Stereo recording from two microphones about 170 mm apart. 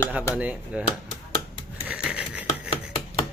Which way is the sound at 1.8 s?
5° right (ahead or behind).